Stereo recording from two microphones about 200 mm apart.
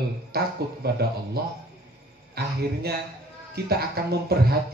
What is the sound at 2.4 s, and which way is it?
Speech, 55° right (ahead or behind).